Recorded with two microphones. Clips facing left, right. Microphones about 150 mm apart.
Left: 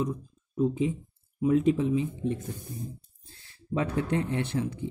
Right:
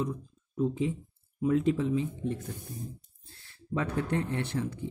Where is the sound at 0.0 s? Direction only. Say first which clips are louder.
Left 2 dB; 15° left (ahead or behind).